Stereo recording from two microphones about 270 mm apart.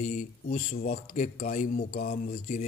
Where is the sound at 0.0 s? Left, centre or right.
Left.